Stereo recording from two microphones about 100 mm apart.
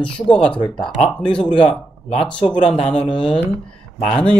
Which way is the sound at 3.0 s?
55° left (ahead or behind).